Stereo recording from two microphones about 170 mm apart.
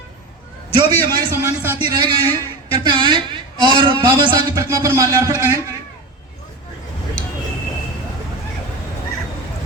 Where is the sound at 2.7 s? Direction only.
25° right (ahead or behind).